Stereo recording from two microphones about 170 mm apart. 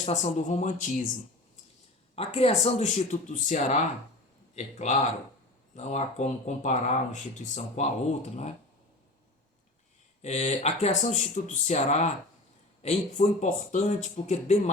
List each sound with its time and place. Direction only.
0.0 s speech: 45° left (ahead or behind)
2.1 s a man's voice: 35° left (ahead or behind)
10.2 s speech: 40° left (ahead or behind)